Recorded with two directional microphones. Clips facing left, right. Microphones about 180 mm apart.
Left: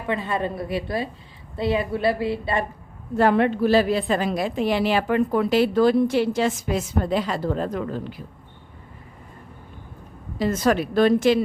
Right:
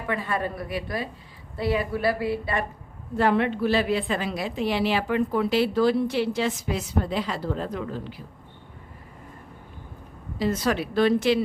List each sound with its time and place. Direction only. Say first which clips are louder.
0.1 s a woman's voice: left 3 dB; 25° left (ahead or behind)
3.2 s a woman's voice: left 4 dB; 45° left (ahead or behind)
10.3 s a woman's voice: left 4 dB; 50° left (ahead or behind)